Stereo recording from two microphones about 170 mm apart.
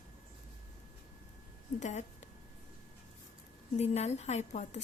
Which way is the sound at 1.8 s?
45° left (ahead or behind).